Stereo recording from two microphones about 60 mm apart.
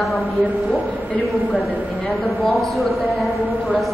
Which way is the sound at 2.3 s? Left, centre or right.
Centre.